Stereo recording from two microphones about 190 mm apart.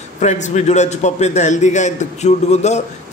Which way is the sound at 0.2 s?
40° left (ahead or behind).